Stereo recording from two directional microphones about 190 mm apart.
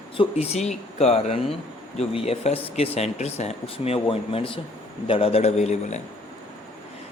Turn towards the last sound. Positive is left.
turn(degrees=35)  # may be behind; listen again after turning